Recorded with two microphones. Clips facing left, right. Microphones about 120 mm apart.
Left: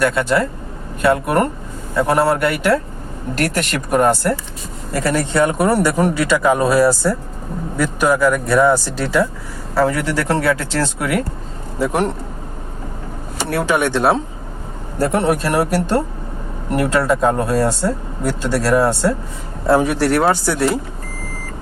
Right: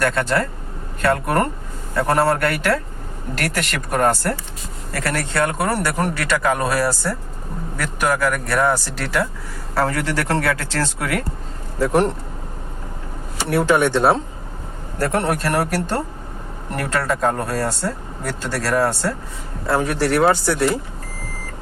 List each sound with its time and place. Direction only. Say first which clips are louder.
0.0 s speech: left 3 dB; 10° left (ahead or behind)
8.2 s speech: left 5 dB; 15° left (ahead or behind)
13.5 s speech: right 1 dB; centre (ahead or behind)
14.9 s speech: left 4 dB; 15° left (ahead or behind)
20.0 s speech: left 1 dB; 5° left (ahead or behind)